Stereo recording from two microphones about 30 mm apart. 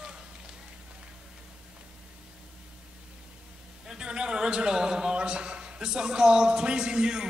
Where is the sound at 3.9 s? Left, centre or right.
Right.